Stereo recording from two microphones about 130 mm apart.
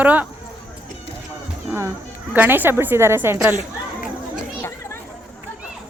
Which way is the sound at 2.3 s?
15° right (ahead or behind).